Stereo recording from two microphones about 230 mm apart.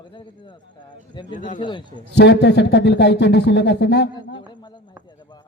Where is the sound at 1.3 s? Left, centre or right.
Left.